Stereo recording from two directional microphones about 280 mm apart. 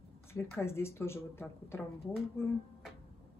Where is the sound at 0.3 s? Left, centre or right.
Centre.